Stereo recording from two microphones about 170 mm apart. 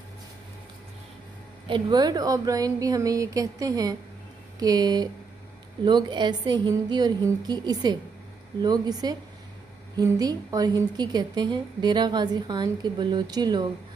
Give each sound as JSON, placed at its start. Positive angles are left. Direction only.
{"t": 1.7, "sound": "a woman's voice", "side_deg": -25}